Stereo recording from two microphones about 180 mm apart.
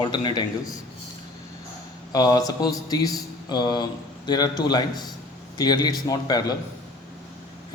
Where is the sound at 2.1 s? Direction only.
20° left (ahead or behind).